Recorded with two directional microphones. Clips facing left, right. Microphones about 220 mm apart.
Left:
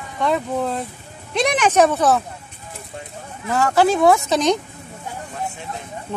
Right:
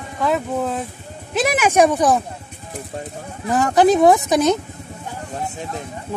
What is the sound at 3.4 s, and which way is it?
Speech, 15° right (ahead or behind).